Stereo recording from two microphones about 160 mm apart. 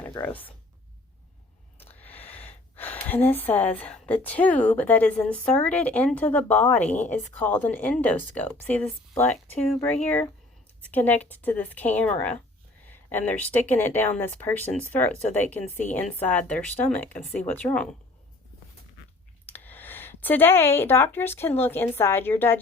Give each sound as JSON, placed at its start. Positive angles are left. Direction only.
{"t": 0.0, "sound": "speech", "side_deg": 10}
{"t": 1.8, "sound": "a sound", "side_deg": 10}
{"t": 2.7, "sound": "a woman's voice", "side_deg": 10}
{"t": 19.5, "sound": "speech", "side_deg": 10}